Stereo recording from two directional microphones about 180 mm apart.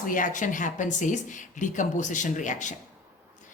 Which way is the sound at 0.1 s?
45° left (ahead or behind).